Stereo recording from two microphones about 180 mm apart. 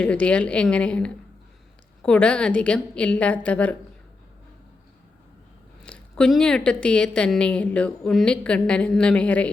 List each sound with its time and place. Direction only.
0.0 s a woman's voice: 5° left (ahead or behind)
5.8 s a woman's voice: 5° left (ahead or behind)